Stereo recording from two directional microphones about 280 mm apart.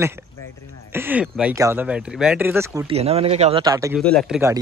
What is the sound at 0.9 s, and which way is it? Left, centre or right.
Speech, centre.